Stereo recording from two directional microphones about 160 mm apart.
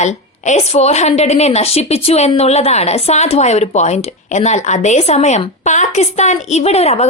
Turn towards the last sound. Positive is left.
turn(degrees=40)  # may be behind; listen again after turning